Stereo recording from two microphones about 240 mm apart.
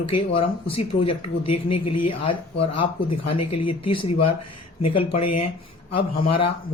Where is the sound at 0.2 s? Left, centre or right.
Left.